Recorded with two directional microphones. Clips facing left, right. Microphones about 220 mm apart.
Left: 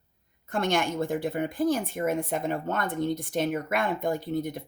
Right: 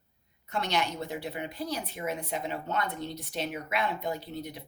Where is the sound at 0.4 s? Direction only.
50° left (ahead or behind).